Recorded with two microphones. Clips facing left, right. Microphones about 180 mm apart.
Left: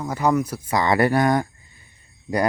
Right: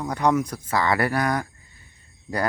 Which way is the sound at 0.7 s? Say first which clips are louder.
Left 4 dB; 20° left (ahead or behind).